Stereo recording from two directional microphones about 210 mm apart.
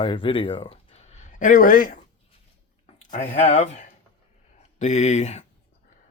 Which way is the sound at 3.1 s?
35° left (ahead or behind).